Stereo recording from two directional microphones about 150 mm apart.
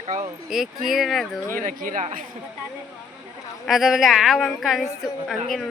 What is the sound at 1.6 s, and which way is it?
Speech, 65° right (ahead or behind).